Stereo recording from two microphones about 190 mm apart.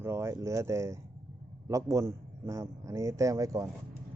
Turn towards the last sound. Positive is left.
turn(degrees=-15)  # may be behind; listen again after turning